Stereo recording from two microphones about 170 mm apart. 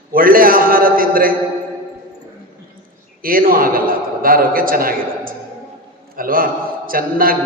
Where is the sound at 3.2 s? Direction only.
55° right (ahead or behind).